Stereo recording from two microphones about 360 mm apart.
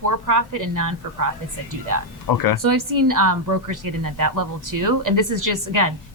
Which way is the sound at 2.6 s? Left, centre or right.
Right.